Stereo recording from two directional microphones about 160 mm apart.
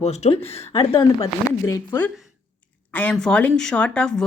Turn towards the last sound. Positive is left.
turn(degrees=5)  # may be behind; listen again after turning